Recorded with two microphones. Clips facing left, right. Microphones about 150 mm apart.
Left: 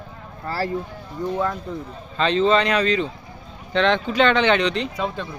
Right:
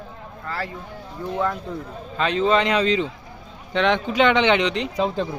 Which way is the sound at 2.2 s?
10° right (ahead or behind).